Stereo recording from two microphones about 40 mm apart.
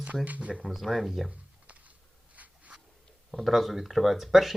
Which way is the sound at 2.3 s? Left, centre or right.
Right.